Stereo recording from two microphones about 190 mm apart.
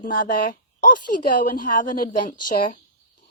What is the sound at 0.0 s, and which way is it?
Speech, 50° left (ahead or behind).